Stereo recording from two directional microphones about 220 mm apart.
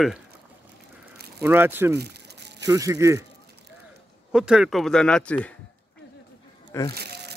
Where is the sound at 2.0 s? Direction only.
50° right (ahead or behind).